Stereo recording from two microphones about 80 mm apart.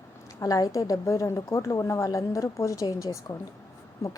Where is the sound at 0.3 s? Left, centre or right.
Left.